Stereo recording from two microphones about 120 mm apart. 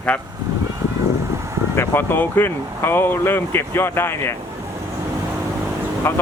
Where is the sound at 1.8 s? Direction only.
15° left (ahead or behind).